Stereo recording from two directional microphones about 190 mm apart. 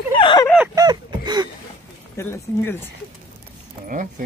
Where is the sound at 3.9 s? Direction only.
45° right (ahead or behind).